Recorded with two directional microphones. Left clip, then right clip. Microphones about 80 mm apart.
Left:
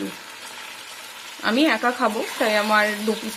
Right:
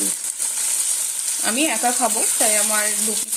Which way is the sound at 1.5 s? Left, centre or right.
Centre.